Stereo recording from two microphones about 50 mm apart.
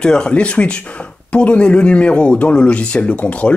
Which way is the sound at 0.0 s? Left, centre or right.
Centre.